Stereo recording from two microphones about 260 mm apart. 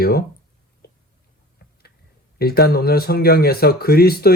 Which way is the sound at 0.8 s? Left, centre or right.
Left.